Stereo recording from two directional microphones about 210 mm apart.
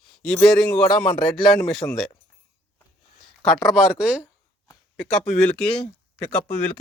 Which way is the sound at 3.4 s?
Centre (ahead or behind).